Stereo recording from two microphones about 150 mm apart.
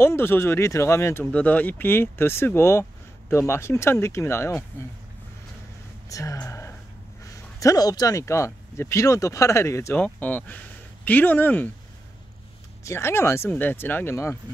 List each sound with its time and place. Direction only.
0.0 s speech: 15° left (ahead or behind)
6.0 s speech: 20° left (ahead or behind)
12.8 s speech: 15° left (ahead or behind)